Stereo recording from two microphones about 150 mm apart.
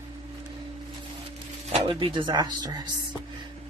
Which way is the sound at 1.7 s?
40° right (ahead or behind).